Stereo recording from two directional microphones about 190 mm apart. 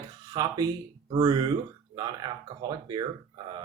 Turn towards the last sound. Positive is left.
turn(degrees=-20)  # may be behind; listen again after turning